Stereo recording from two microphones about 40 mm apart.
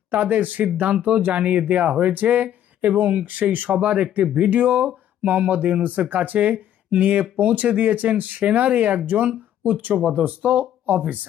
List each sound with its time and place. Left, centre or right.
0.1 s speech: right